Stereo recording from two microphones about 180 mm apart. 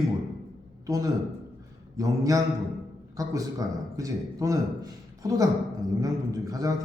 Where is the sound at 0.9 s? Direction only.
20° right (ahead or behind).